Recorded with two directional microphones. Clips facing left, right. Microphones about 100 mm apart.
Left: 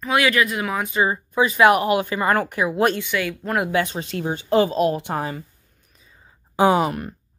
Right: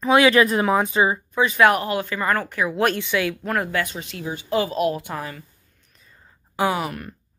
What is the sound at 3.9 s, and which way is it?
Speech, 40° left (ahead or behind).